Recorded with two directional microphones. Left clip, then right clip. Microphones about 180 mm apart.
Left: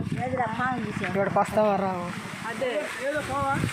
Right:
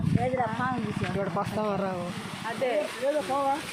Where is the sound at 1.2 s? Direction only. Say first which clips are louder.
Left 8 dB; 65° left (ahead or behind).